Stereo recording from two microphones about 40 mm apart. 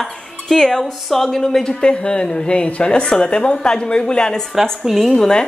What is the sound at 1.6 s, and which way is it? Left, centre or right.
Speech, left.